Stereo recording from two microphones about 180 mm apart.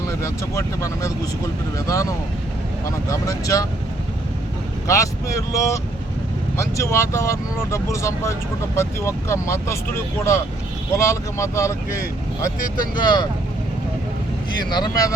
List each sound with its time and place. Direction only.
0.2 s speech: 15° left (ahead or behind)
5.5 s speech: 15° left (ahead or behind)
14.6 s speech: 25° left (ahead or behind)